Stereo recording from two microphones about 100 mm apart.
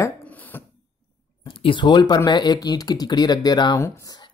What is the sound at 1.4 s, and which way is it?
Speech, 60° left (ahead or behind).